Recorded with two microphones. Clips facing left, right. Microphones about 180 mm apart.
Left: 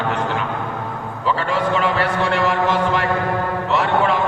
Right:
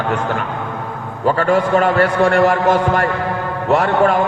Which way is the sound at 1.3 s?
45° right (ahead or behind).